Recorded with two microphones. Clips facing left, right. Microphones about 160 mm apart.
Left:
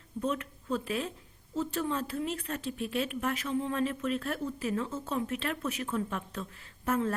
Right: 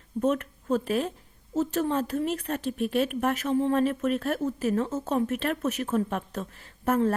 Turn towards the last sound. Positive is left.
turn(degrees=-45)  # may be behind; listen again after turning